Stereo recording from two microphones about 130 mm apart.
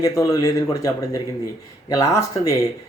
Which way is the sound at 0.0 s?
25° left (ahead or behind).